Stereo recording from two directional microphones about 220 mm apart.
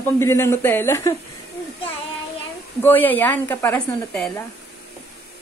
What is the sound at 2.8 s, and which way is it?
Speech, 10° left (ahead or behind).